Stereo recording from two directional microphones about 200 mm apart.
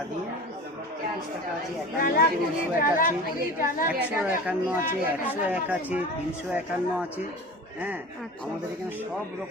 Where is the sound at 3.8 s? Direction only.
10° right (ahead or behind).